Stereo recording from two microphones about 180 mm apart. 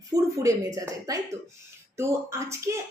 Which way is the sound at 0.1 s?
20° right (ahead or behind).